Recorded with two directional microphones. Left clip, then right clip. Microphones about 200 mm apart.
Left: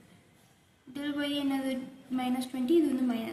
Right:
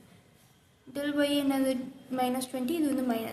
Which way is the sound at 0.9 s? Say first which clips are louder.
Right 5 dB; 55° right (ahead or behind).